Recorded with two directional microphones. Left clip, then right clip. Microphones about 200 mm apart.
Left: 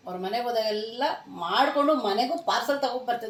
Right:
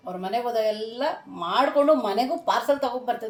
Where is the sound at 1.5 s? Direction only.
15° right (ahead or behind).